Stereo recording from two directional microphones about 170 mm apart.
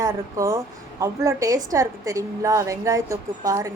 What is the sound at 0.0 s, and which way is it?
A woman's voice, 20° right (ahead or behind).